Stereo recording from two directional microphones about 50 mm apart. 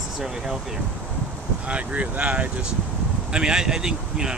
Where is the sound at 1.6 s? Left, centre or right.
Right.